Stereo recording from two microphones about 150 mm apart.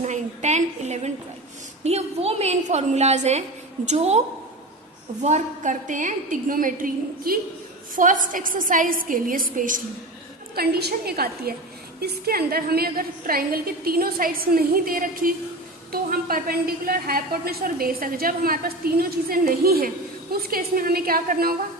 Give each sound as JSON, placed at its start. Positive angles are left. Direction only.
{"t": 0.0, "sound": "a woman's voice", "side_deg": -50}
{"t": 5.2, "sound": "a woman's voice", "side_deg": -55}
{"t": 10.5, "sound": "a woman's voice", "side_deg": -90}